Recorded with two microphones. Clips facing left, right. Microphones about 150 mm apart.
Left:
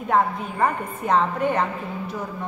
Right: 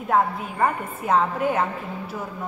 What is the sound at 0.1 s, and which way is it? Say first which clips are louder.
A woman's voice: even; 5° right (ahead or behind).